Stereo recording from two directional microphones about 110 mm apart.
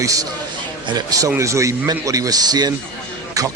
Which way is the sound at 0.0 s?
30° right (ahead or behind).